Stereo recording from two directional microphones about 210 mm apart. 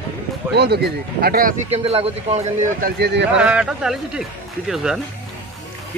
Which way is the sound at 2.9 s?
50° right (ahead or behind).